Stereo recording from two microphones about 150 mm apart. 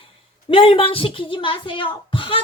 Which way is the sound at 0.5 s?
40° left (ahead or behind).